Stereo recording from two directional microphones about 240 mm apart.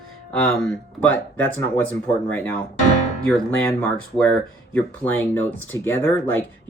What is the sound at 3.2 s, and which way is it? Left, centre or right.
Speech, centre.